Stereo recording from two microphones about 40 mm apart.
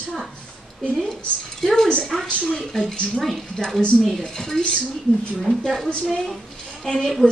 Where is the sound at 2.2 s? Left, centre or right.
Left.